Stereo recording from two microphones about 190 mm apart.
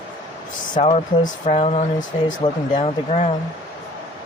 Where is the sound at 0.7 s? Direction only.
35° left (ahead or behind).